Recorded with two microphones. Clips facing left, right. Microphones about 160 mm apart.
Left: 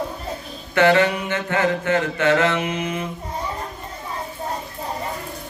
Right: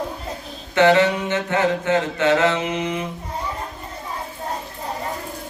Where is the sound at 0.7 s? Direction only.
20° right (ahead or behind).